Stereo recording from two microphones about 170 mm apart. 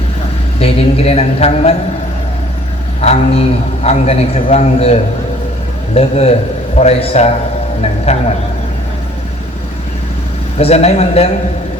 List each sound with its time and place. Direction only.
0.6 s a man's voice: 35° left (ahead or behind)
3.0 s a man's voice: 40° left (ahead or behind)
10.6 s a man's voice: 40° left (ahead or behind)